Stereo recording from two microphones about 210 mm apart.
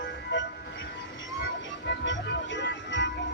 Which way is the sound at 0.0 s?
60° left (ahead or behind).